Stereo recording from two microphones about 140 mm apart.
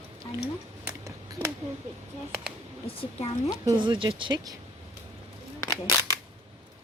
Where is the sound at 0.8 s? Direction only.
20° right (ahead or behind).